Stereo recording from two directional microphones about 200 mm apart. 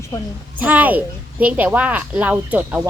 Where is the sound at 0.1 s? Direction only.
15° left (ahead or behind).